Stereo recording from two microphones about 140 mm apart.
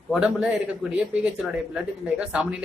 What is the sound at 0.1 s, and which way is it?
Speech, 5° right (ahead or behind).